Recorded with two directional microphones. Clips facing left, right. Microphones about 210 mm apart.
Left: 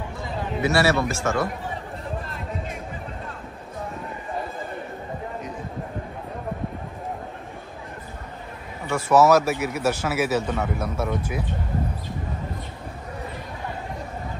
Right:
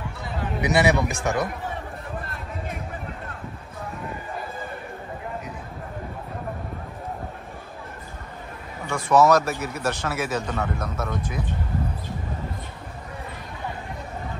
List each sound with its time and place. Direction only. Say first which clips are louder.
0.6 s speech: even; 15° right (ahead or behind)
8.9 s speech: left 1 dB; 5° left (ahead or behind)